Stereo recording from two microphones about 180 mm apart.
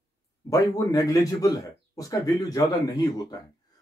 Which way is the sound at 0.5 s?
20° left (ahead or behind).